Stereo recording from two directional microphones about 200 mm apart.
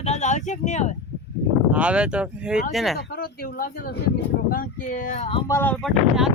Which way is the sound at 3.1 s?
50° left (ahead or behind).